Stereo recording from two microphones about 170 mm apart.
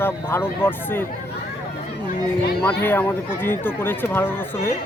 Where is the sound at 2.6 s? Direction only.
10° left (ahead or behind).